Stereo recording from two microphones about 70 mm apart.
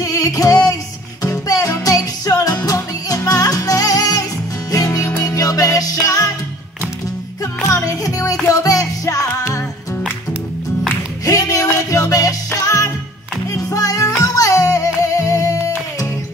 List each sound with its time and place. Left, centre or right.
0.0 s music: left
1.9 s music: left
7.6 s music: left
11.2 s music: left